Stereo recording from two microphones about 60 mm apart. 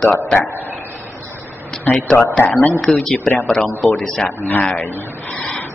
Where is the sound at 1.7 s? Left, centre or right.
Centre.